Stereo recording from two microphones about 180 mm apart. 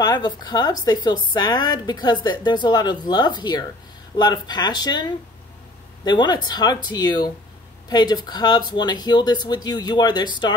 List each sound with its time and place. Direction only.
0.0 s speech: 20° left (ahead or behind)